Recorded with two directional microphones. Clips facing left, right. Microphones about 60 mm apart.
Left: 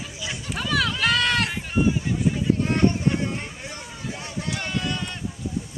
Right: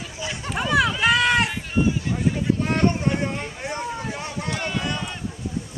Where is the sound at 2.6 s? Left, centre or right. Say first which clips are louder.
Even; right.